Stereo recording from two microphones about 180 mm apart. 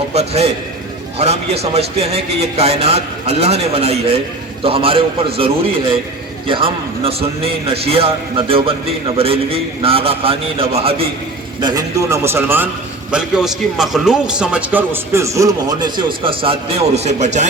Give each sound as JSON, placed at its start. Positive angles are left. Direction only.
{"t": 0.1, "sound": "a man's voice", "side_deg": -35}
{"t": 11.6, "sound": "a man's voice", "side_deg": -20}